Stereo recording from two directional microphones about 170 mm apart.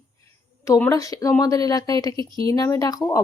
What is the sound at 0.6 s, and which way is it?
Speech, 20° left (ahead or behind).